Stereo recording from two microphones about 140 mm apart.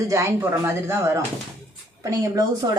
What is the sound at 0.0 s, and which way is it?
A woman's voice, 25° right (ahead or behind).